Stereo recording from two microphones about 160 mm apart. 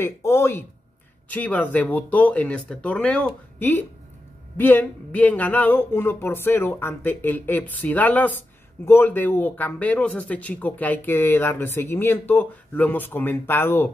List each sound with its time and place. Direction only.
0.0 s speech: 15° left (ahead or behind)